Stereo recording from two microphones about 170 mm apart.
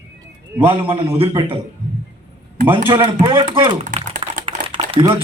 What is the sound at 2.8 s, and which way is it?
A man's voice, 25° right (ahead or behind).